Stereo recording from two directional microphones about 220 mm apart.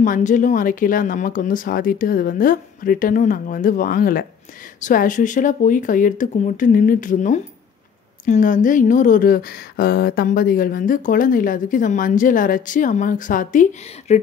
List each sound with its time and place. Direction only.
0.0 s speech: 35° left (ahead or behind)